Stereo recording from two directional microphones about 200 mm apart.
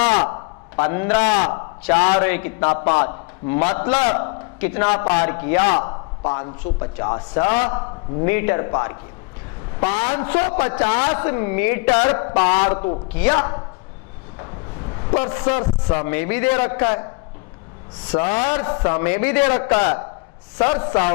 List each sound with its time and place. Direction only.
0.0 s a sound: 25° left (ahead or behind)
0.9 s a woman's voice: 15° left (ahead or behind)
1.4 s a man's voice: 25° left (ahead or behind)
2.2 s a woman's voice: 15° left (ahead or behind)
4.8 s a man's voice: 25° left (ahead or behind)
5.5 s a man's voice: 25° left (ahead or behind)
12.3 s a man's voice: 30° left (ahead or behind)
12.6 s a woman's voice: 15° left (ahead or behind)
15.0 s a man's voice: 25° left (ahead or behind)
16.8 s a man's voice: 30° left (ahead or behind)
18.2 s a man's voice: 25° left (ahead or behind)
19.5 s a man's voice: 25° left (ahead or behind)